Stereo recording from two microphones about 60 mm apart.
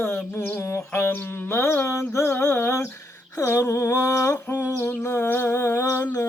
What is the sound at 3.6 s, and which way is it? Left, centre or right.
Humming, left.